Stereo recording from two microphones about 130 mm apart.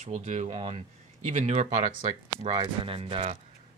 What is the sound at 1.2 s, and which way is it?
Speech, 60° right (ahead or behind).